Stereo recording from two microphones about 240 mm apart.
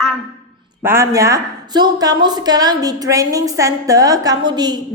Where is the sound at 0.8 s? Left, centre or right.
Centre.